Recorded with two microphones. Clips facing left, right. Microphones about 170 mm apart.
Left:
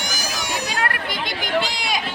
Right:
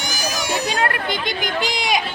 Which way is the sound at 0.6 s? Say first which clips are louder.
Right 4 dB; 25° right (ahead or behind).